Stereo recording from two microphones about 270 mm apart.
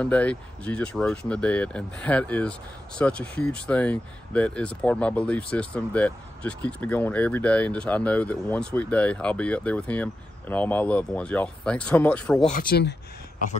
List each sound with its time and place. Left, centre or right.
0.0 s speech: centre
12.4 s speech: left